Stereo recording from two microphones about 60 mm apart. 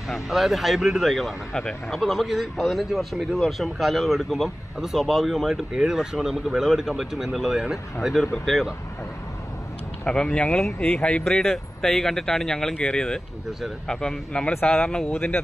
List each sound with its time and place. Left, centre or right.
0.1 s a man's voice: centre
1.5 s speech: centre
1.9 s a man's voice: centre
10.0 s speech: centre
11.2 s speech: centre